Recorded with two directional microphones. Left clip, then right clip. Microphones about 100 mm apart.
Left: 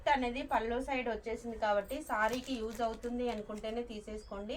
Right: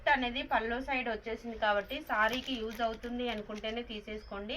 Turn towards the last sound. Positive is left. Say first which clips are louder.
# right 2 dB
turn(degrees=30)  # may be behind; listen again after turning